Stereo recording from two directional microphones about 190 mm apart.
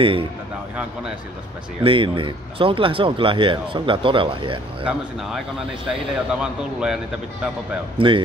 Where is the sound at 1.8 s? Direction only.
25° right (ahead or behind).